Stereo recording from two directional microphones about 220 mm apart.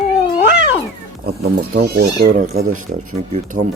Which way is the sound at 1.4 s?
45° right (ahead or behind).